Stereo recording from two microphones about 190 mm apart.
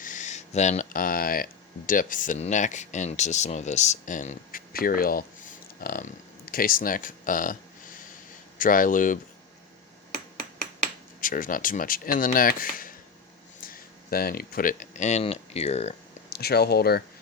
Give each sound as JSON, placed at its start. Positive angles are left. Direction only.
{"t": 0.0, "sound": "speech", "side_deg": 40}
{"t": 8.5, "sound": "speech", "side_deg": 45}
{"t": 11.2, "sound": "speech", "side_deg": 45}
{"t": 14.1, "sound": "speech", "side_deg": 50}
{"t": 16.3, "sound": "speech", "side_deg": 55}